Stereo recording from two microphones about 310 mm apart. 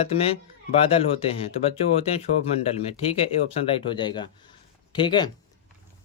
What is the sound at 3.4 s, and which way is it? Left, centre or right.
Speech, centre.